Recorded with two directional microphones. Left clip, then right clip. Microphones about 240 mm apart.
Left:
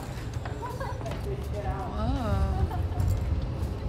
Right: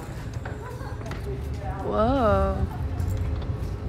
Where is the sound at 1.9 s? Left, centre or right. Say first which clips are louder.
Right 17 dB; centre.